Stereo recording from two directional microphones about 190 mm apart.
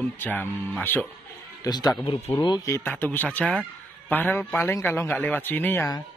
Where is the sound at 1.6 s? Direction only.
20° left (ahead or behind).